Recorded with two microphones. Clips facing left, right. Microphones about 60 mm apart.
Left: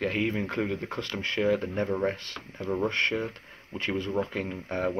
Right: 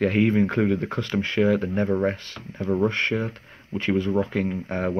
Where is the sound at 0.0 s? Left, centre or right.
Right.